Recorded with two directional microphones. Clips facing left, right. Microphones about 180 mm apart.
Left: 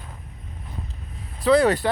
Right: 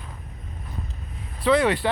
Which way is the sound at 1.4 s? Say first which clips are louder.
Left 2 dB; 40° left (ahead or behind).